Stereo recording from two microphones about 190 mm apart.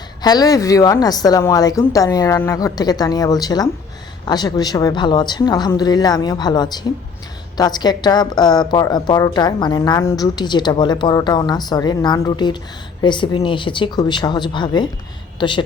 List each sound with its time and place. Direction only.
0.2 s speech: 20° left (ahead or behind)